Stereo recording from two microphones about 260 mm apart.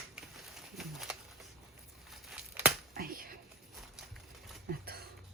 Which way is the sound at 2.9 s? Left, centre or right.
Right.